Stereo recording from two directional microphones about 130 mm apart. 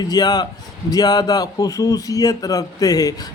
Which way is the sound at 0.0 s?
30° left (ahead or behind).